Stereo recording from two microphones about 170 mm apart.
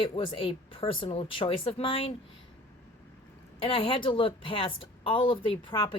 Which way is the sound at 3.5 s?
35° left (ahead or behind).